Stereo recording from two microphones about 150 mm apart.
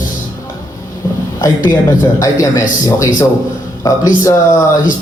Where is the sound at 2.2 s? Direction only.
20° left (ahead or behind).